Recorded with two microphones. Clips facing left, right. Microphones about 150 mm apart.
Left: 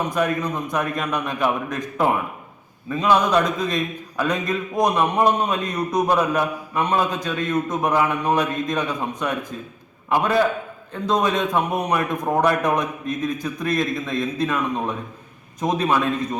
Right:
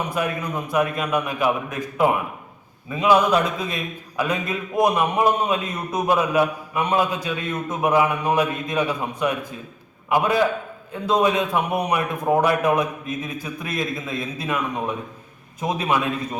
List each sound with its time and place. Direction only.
0.2 s a man's voice: 10° right (ahead or behind)